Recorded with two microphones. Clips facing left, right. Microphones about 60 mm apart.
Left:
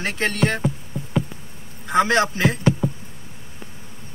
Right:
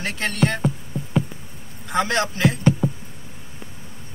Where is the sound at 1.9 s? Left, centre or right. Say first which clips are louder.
Left 4 dB; centre.